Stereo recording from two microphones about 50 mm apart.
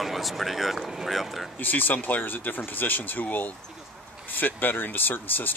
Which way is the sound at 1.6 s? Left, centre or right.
Left.